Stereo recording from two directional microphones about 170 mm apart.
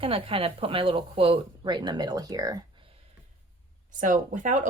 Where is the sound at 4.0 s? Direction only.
50° right (ahead or behind).